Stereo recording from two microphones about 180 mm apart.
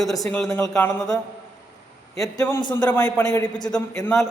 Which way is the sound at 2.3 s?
20° left (ahead or behind).